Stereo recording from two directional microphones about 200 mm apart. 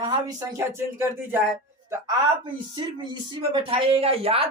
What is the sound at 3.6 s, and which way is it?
Speech, 30° right (ahead or behind).